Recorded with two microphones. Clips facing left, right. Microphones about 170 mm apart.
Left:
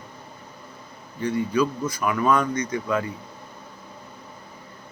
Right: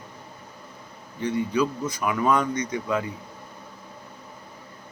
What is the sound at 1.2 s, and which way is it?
Speech, 20° right (ahead or behind).